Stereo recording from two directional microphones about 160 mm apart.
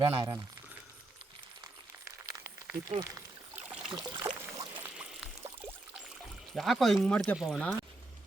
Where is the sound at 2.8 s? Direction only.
25° right (ahead or behind).